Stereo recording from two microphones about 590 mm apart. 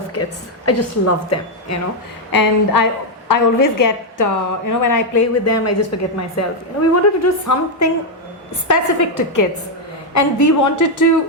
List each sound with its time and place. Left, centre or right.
0.6 s a woman's voice: left
2.3 s a woman's voice: left